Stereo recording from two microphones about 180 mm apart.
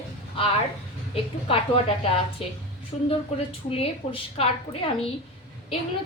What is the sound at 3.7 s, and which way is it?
Speech, 30° left (ahead or behind).